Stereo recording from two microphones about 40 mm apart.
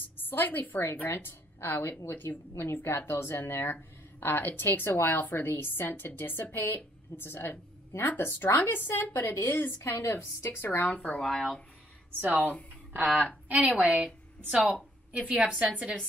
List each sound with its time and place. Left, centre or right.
0.2 s a woman's voice: left
1.0 s a woman's voice: left
4.2 s a woman's voice: left
8.6 s a woman's voice: left
9.1 s a woman's voice: left
10.9 s speech: left
11.1 s speech: centre
12.1 s speech: right
12.9 s a woman's voice: right